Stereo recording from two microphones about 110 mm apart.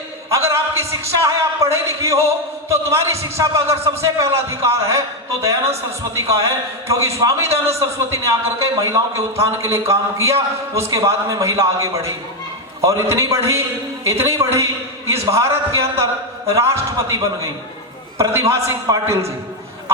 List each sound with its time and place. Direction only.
0.3 s a man's voice: 25° right (ahead or behind)